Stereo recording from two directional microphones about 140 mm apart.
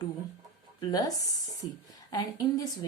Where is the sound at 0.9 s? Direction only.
25° left (ahead or behind).